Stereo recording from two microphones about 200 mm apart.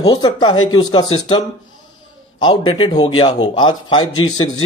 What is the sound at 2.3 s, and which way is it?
Speech, 25° left (ahead or behind).